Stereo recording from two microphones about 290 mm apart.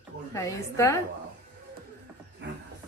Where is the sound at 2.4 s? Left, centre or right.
Right.